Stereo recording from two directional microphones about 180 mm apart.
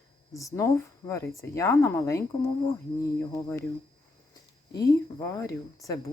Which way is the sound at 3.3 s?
15° left (ahead or behind).